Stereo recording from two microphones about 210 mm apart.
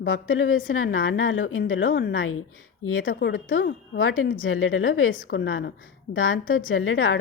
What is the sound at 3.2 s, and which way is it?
Speech, 65° left (ahead or behind).